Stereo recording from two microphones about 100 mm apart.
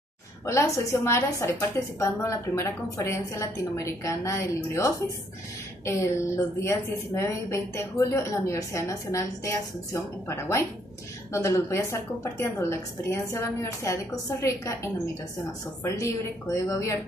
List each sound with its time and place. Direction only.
0.5 s a woman's voice: 30° left (ahead or behind)